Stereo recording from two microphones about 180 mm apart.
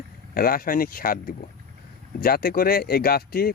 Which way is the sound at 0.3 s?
55° left (ahead or behind).